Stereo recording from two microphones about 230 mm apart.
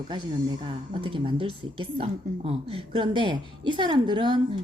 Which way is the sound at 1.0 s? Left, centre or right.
Right.